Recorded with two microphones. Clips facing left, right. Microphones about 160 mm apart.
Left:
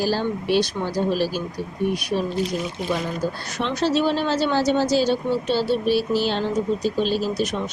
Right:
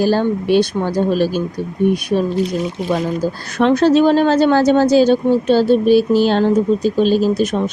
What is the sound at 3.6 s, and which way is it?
Speech, 50° right (ahead or behind).